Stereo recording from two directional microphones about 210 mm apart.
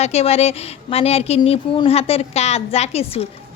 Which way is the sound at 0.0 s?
30° left (ahead or behind).